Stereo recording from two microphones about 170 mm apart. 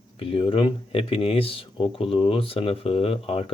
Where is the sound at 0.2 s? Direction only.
30° left (ahead or behind).